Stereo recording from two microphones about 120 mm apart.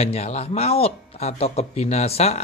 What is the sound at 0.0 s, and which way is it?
Speech, 60° left (ahead or behind).